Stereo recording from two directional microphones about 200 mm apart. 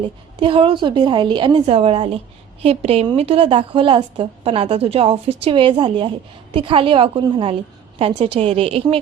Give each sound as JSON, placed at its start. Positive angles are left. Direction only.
{"t": 0.3, "sound": "a woman's voice", "side_deg": -25}